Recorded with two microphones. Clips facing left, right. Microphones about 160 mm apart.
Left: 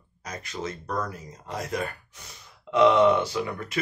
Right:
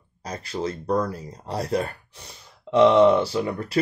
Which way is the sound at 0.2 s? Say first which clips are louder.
Right 5 dB; 30° right (ahead or behind).